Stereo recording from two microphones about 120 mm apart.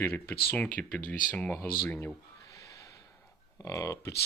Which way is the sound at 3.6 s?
25° left (ahead or behind).